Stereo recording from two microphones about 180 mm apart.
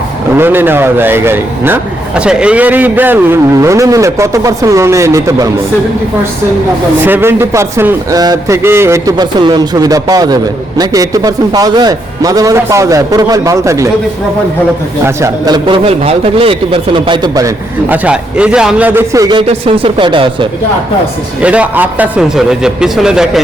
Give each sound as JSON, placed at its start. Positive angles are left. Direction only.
{"t": 0.3, "sound": "speech", "side_deg": -10}
{"t": 7.0, "sound": "a man's voice", "side_deg": -10}
{"t": 15.0, "sound": "a man's voice", "side_deg": -20}
{"t": 21.4, "sound": "a man's voice", "side_deg": -5}